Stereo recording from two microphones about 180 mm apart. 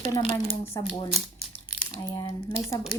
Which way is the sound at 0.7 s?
20° left (ahead or behind).